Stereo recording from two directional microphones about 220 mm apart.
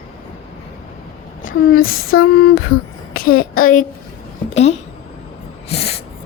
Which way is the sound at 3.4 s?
40° left (ahead or behind).